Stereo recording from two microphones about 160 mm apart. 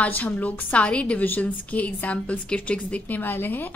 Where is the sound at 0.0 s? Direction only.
10° left (ahead or behind).